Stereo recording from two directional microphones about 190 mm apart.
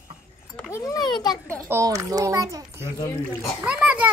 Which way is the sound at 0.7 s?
15° left (ahead or behind).